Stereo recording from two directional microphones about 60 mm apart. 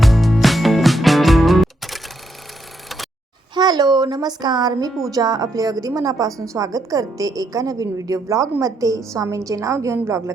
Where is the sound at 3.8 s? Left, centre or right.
Right.